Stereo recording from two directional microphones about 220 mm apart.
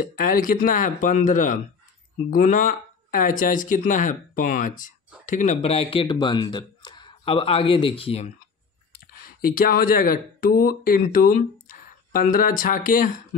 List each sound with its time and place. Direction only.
0.0 s speech: 40° left (ahead or behind)
9.5 s speech: 40° left (ahead or behind)